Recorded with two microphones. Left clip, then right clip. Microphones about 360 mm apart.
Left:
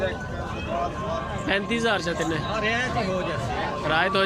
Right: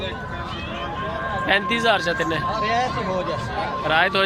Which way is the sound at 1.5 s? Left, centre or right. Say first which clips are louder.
Right 5 dB; centre.